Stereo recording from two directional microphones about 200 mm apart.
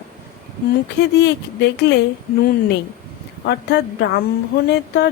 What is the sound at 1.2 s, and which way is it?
Speech, 60° left (ahead or behind).